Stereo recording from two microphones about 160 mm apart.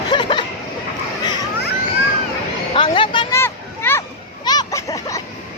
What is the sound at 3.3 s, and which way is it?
Children playing, 15° left (ahead or behind).